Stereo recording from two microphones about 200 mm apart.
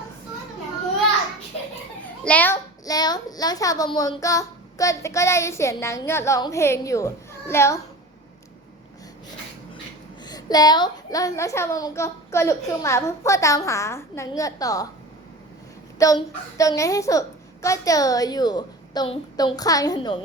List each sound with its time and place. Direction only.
2.0 s a child's voice: 5° left (ahead or behind)
10.2 s a child's voice: 20° left (ahead or behind)
16.0 s a child's voice: 15° left (ahead or behind)